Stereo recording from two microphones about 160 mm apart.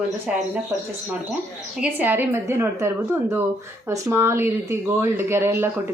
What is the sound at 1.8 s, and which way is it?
Speech, 10° right (ahead or behind).